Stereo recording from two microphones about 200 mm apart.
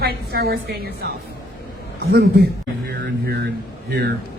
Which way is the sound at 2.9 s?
55° right (ahead or behind).